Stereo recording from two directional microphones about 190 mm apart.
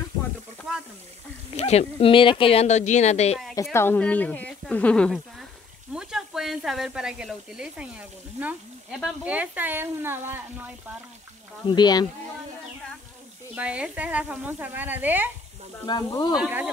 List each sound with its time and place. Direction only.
0.7 s a sound: centre (ahead or behind)
1.6 s speech: 35° left (ahead or behind)
3.7 s speech: 10° left (ahead or behind); by 10.7 s 10° right (ahead or behind)
11.6 s speech: 20° left (ahead or behind)
13.6 s speech: 5° right (ahead or behind)
15.9 s speech: 20° left (ahead or behind)
16.3 s speech: 5° right (ahead or behind)